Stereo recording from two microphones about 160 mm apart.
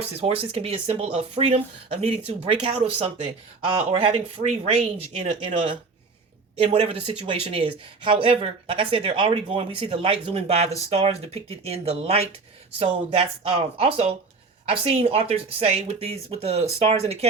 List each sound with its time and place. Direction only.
0.2 s speech: 35° right (ahead or behind)
6.6 s speech: 40° right (ahead or behind)